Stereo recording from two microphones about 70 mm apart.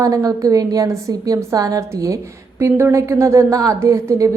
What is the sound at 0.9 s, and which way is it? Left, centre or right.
A woman's voice, right.